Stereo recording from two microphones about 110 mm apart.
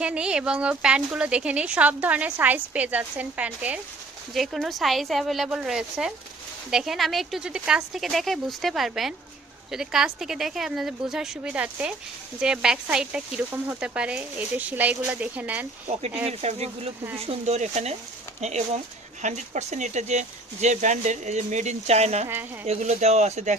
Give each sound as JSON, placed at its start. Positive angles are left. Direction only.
{"t": 0.0, "sound": "a woman's voice", "side_deg": -10}
{"t": 4.4, "sound": "a woman's voice", "side_deg": 0}
{"t": 16.2, "sound": "speech", "side_deg": -75}